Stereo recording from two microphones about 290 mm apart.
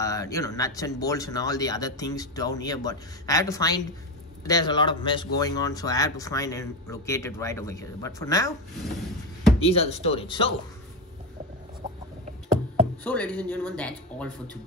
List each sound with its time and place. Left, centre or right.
0.0 s speech: centre
9.6 s speech: centre
13.0 s a man's voice: centre